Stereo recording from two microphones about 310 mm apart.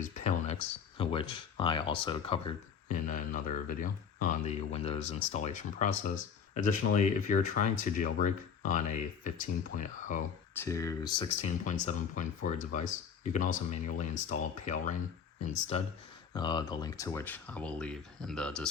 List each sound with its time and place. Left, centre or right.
0.0 s speech: left
10.6 s speech: centre